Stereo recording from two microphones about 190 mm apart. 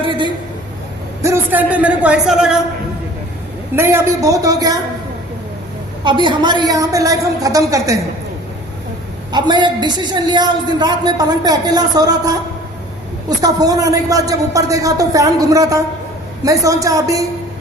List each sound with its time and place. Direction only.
0.0 s a sound: 25° right (ahead or behind)
1.2 s speech: 10° right (ahead or behind)
3.8 s speech: 15° right (ahead or behind)
6.1 s speech: 25° right (ahead or behind)
9.3 s a man's voice: 25° right (ahead or behind)
13.4 s speech: 20° right (ahead or behind)